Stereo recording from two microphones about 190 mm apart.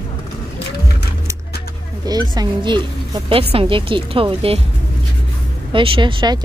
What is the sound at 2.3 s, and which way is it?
A woman's voice, 25° right (ahead or behind).